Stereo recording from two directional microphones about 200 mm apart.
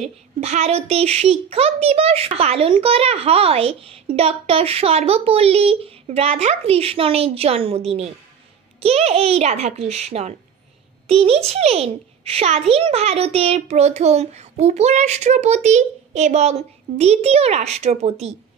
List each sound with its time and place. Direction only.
0.0 s a child's voice: 35° right (ahead or behind)